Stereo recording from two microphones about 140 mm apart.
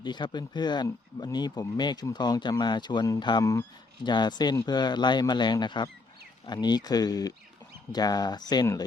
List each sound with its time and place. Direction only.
0.0 s speech: 30° left (ahead or behind)